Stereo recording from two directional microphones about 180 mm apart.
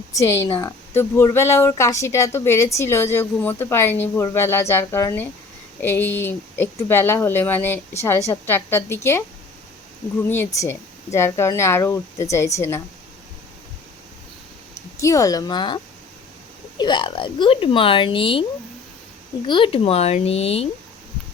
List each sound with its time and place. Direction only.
0.2 s speech: 15° left (ahead or behind)
10.2 s speech: 10° left (ahead or behind)
14.8 s speech: 15° left (ahead or behind)
19.5 s speech: 25° left (ahead or behind)